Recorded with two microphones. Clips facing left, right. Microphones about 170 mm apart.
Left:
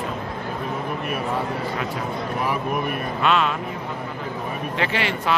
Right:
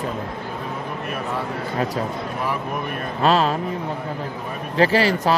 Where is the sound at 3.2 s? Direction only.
35° right (ahead or behind).